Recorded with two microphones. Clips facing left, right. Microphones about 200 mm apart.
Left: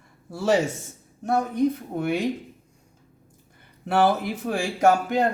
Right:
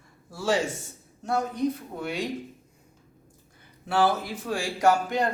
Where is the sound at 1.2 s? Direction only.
60° left (ahead or behind).